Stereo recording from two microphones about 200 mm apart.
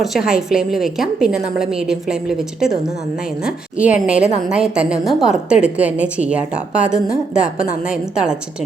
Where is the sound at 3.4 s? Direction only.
5° right (ahead or behind).